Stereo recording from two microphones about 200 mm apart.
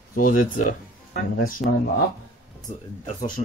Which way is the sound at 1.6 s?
Centre (ahead or behind).